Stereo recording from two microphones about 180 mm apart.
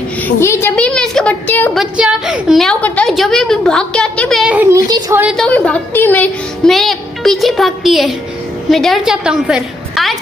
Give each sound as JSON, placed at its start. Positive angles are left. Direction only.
{"t": 0.4, "sound": "a woman's voice", "side_deg": 15}
{"t": 1.8, "sound": "a woman's voice", "side_deg": -5}
{"t": 4.6, "sound": "a child's voice", "side_deg": -20}
{"t": 5.2, "sound": "a woman's voice", "side_deg": 0}